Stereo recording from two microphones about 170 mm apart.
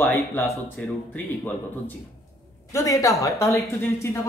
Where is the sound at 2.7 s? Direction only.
20° left (ahead or behind).